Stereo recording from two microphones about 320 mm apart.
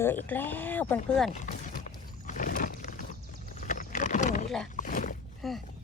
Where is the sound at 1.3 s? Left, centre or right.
Left.